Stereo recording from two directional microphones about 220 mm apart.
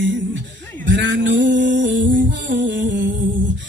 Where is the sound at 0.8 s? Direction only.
55° right (ahead or behind).